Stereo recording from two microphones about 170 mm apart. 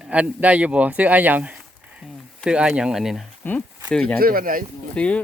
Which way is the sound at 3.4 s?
10° left (ahead or behind).